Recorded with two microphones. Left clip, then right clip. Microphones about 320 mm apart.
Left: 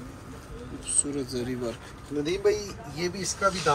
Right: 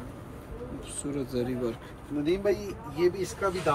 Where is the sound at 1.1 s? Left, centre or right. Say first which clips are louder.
Even; centre.